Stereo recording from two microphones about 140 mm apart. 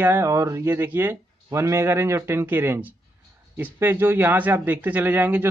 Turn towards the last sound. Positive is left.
turn(degrees=-15)  # may be behind; listen again after turning